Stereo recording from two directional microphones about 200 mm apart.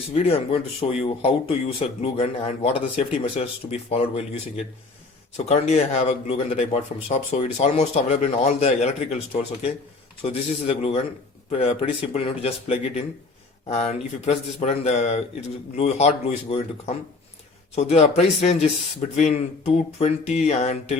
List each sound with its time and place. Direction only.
0.1 s speech: 30° left (ahead or behind)
12.1 s speech: 30° left (ahead or behind)
17.7 s speech: 30° left (ahead or behind)